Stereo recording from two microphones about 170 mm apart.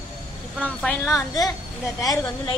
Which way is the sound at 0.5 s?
10° left (ahead or behind).